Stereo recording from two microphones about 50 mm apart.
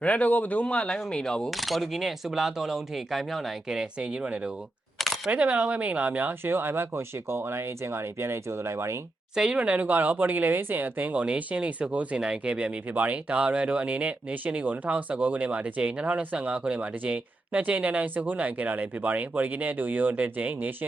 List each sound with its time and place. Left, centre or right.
0.0 s speech: left
1.5 s speech: centre
4.0 s speech: right
4.9 s single-lens reflex camera: centre
5.3 s speech: right
6.4 s speech: right
9.3 s speech: centre
9.6 s speech: right
9.8 s speech: right